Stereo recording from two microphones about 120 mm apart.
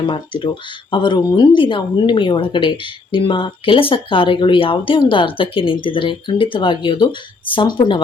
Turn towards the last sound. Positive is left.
turn(degrees=40)  # may be behind; listen again after turning